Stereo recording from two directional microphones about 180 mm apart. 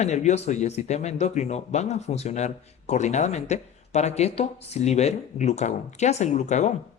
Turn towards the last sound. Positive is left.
turn(degrees=40)  # may be behind; listen again after turning